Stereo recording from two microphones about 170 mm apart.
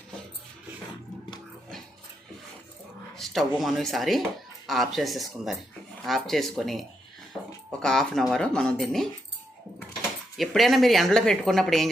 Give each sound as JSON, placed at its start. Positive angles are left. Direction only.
{"t": 3.2, "sound": "speech", "side_deg": 0}
{"t": 7.3, "sound": "a sound", "side_deg": 20}
{"t": 7.7, "sound": "speech", "side_deg": 5}